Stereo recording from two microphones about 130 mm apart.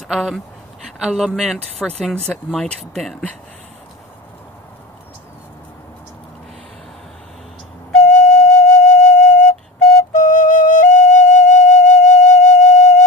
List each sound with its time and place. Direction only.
0.0 s speech: centre (ahead or behind)
8.0 s flute: 65° left (ahead or behind)